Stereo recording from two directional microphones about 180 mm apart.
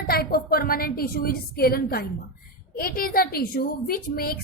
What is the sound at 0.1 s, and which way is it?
A woman's voice, 55° left (ahead or behind).